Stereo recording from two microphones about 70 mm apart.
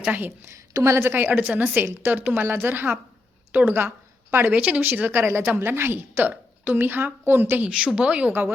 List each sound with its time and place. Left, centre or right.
0.1 s a woman's voice: right
7.7 s speech: centre